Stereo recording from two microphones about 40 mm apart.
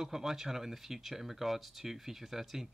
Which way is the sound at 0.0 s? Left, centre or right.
Centre.